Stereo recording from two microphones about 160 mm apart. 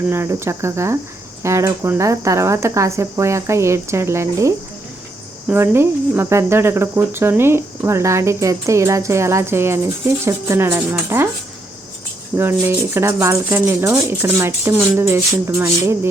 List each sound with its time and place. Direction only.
0.1 s speech: 15° right (ahead or behind)
12.4 s speech: 15° right (ahead or behind)